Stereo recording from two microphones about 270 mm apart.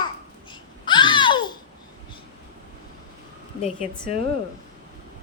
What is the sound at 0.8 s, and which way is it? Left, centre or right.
Babbling, centre.